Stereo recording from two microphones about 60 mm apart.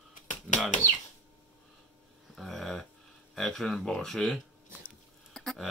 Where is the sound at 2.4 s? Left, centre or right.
Centre.